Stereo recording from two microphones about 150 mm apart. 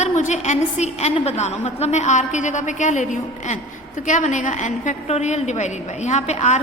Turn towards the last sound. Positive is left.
turn(degrees=50)  # may be behind; listen again after turning